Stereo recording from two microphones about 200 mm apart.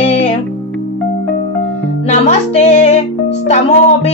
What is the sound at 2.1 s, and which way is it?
Speech, 35° left (ahead or behind).